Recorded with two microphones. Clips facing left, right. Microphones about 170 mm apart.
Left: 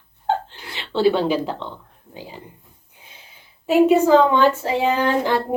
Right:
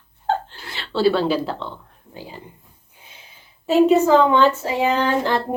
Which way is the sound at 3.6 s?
10° left (ahead or behind).